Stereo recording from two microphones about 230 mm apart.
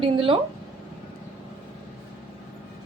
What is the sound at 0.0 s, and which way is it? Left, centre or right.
Speech, right.